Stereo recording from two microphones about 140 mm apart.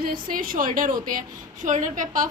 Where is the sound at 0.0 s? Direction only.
90° right.